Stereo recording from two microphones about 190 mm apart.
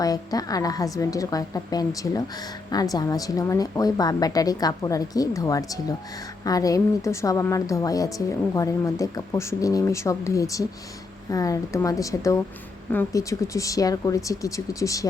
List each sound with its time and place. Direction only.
0.0 s a woman's voice: 20° left (ahead or behind)